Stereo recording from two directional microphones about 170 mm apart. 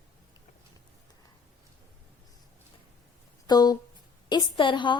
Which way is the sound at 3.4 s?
25° left (ahead or behind).